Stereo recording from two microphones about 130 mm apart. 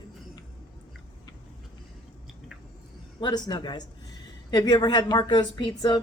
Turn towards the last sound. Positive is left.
turn(degrees=35)  # may be behind; listen again after turning